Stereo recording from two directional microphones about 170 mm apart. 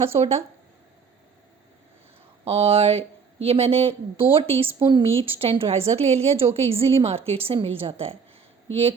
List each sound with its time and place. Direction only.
0.0 s speech: 35° right (ahead or behind)
2.4 s speech: 35° right (ahead or behind)